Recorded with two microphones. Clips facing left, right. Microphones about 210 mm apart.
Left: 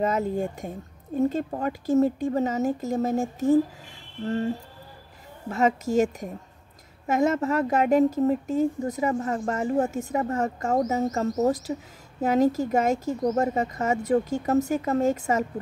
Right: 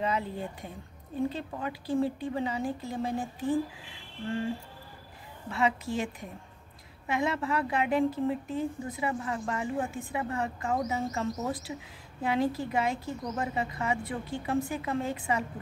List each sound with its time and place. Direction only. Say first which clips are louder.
0.0 s a woman's voice: left 7 dB; 45° left (ahead or behind)
5.5 s a woman's voice: left 6 dB; 45° left (ahead or behind)